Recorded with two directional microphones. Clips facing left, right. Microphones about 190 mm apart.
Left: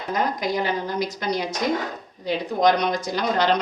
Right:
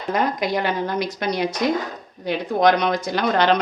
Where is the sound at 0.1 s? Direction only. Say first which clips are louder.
Right 3 dB; 65° right (ahead or behind).